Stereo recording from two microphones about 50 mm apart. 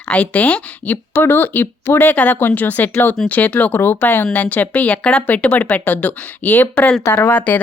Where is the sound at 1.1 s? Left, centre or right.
Left.